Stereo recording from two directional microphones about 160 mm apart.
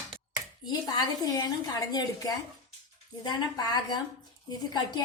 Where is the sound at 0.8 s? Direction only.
20° left (ahead or behind).